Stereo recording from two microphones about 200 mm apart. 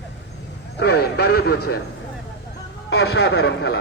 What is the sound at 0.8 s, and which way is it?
Speech, 50° left (ahead or behind).